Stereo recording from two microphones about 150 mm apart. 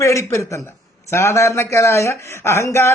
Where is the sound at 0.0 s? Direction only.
20° left (ahead or behind).